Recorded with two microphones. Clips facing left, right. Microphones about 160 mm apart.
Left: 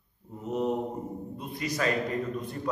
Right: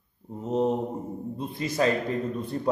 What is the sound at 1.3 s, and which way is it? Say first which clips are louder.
Speech: right 5 dB; 25° right (ahead or behind).